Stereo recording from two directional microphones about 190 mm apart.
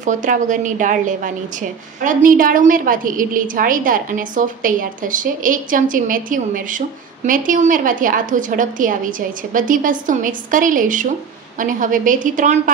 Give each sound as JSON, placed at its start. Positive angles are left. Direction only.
{"t": 0.0, "sound": "a woman's voice", "side_deg": -40}